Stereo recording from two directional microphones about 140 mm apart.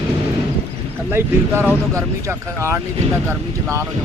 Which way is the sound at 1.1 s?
15° right (ahead or behind).